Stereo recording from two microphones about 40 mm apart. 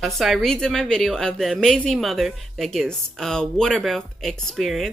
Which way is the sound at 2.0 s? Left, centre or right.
Centre.